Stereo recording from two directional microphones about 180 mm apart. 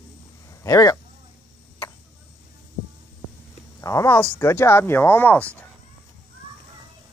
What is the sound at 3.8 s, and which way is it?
Speech, 15° left (ahead or behind).